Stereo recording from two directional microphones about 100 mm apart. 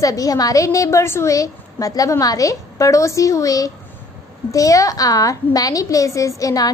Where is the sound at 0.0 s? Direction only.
35° left (ahead or behind).